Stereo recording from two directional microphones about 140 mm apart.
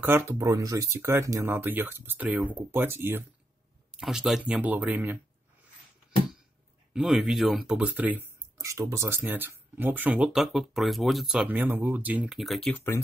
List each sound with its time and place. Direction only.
0.0 s speech: 15° right (ahead or behind)
3.9 s speech: 5° right (ahead or behind)
6.9 s speech: 5° right (ahead or behind)
11.4 s speech: 15° right (ahead or behind); by 12.8 s 5° left (ahead or behind)